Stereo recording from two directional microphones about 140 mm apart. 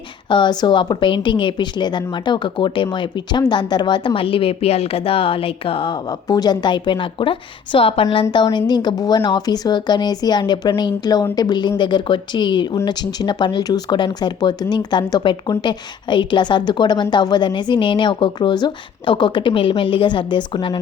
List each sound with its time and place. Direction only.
0.3 s speech: 35° left (ahead or behind)